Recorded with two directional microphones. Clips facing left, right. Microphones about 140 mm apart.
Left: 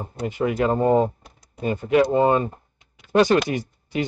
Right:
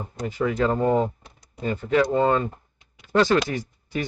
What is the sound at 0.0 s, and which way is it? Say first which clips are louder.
Speech: left 2 dB; 25° left (ahead or behind).